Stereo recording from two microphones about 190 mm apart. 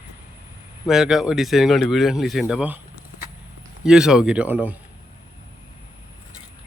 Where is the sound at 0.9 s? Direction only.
Centre (ahead or behind).